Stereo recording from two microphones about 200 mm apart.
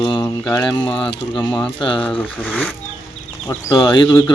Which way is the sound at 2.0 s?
5° left (ahead or behind).